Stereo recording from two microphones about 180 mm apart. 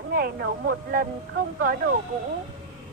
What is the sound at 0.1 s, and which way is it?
Speech, 55° right (ahead or behind).